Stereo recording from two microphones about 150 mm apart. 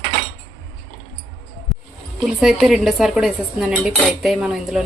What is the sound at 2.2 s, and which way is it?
Speech, centre (ahead or behind).